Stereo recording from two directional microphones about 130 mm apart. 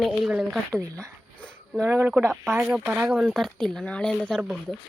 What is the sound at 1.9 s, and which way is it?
Speech, 20° right (ahead or behind).